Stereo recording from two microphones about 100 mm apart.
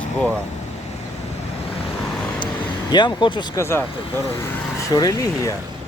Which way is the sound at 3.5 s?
25° left (ahead or behind).